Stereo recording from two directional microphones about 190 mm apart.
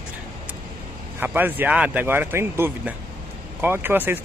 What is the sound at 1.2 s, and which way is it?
Speech, 10° right (ahead or behind).